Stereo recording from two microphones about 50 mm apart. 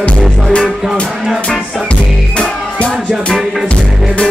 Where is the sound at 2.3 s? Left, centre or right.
Left.